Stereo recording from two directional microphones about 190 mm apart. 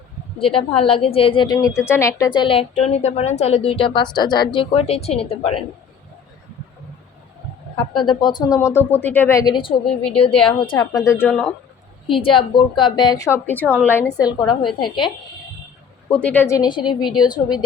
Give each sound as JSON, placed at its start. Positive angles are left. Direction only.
{"t": 0.3, "sound": "a woman's voice", "side_deg": 30}
{"t": 8.0, "sound": "a woman's voice", "side_deg": 25}
{"t": 12.4, "sound": "a woman's voice", "side_deg": 25}
{"t": 16.0, "sound": "a woman's voice", "side_deg": 5}